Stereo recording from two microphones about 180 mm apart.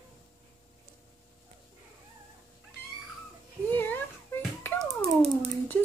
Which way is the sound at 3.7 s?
10° left (ahead or behind).